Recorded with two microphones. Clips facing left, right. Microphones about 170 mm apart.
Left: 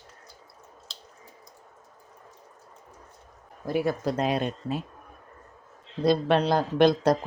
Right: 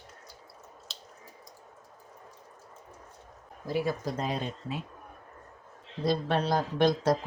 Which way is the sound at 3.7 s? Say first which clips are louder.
Left 4 dB; 55° left (ahead or behind).